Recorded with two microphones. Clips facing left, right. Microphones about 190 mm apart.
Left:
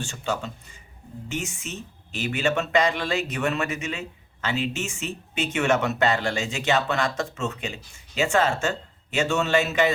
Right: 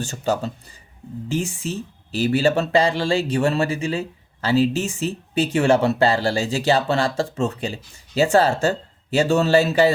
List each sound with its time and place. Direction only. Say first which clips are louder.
0.0 s speech: right 6 dB; 40° right (ahead or behind)